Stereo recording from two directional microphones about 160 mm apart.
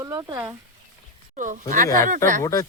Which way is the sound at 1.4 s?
55° right (ahead or behind).